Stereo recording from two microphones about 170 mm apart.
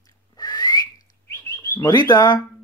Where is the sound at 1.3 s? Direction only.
20° left (ahead or behind).